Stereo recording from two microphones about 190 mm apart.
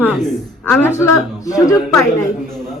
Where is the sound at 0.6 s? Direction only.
10° left (ahead or behind).